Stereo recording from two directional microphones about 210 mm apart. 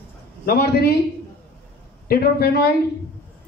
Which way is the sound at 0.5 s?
45° left (ahead or behind).